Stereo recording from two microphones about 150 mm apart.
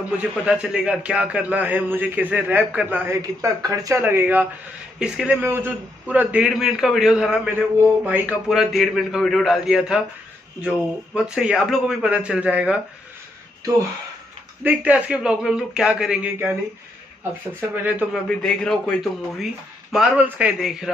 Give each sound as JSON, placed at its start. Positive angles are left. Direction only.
{"t": 0.2, "sound": "a man's voice", "side_deg": -5}
{"t": 3.2, "sound": "a man's voice", "side_deg": -20}
{"t": 8.5, "sound": "a man's voice", "side_deg": 0}
{"t": 11.1, "sound": "a man's voice", "side_deg": -5}
{"t": 14.6, "sound": "a man's voice", "side_deg": -10}
{"t": 17.6, "sound": "a man's voice", "side_deg": -10}
{"t": 18.1, "sound": "a man's voice", "side_deg": 5}